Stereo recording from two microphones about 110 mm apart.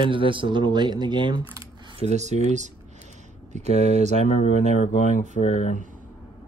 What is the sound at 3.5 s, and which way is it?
Speech, 90° right.